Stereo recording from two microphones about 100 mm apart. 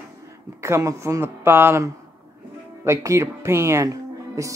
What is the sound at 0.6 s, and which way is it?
Speech, 30° right (ahead or behind).